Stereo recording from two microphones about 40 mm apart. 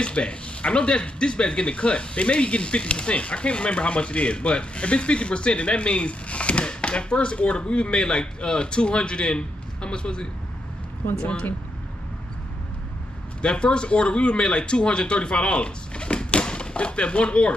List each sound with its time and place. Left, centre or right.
0.0 s speech: left
13.4 s speech: left